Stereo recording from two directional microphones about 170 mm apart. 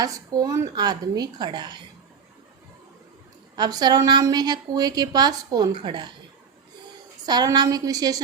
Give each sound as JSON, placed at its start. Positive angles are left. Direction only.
{"t": 0.0, "sound": "a woman's voice", "side_deg": -20}
{"t": 3.5, "sound": "a woman's voice", "side_deg": -25}
{"t": 7.3, "sound": "a woman's voice", "side_deg": -25}